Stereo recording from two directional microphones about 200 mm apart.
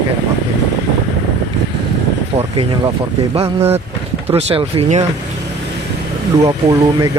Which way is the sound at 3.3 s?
30° right (ahead or behind).